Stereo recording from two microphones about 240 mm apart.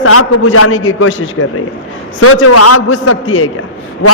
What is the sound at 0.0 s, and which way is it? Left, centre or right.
A man's voice, left.